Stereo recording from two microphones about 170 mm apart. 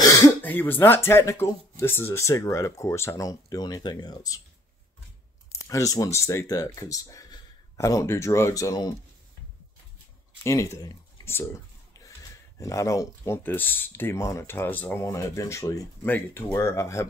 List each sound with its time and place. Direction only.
0.0 s speech: 10° left (ahead or behind)
5.5 s speech: 20° left (ahead or behind)
10.4 s speech: 15° left (ahead or behind)